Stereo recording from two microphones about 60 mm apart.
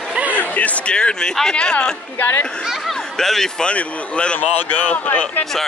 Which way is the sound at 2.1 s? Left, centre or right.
Left.